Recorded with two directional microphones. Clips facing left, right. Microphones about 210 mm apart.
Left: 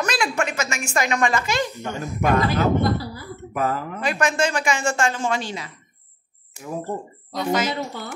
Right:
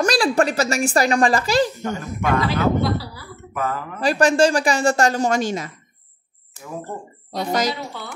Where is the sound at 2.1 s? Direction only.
45° left (ahead or behind).